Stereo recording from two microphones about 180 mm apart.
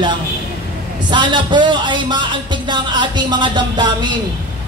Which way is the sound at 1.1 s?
25° right (ahead or behind).